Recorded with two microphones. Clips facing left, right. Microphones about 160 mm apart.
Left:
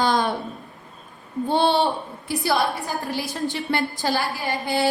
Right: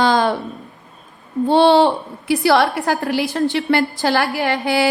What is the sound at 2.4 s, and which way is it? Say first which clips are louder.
Music: right 7 dB; 85° right.